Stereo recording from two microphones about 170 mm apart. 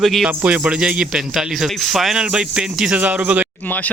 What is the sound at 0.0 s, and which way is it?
Speech, centre (ahead or behind).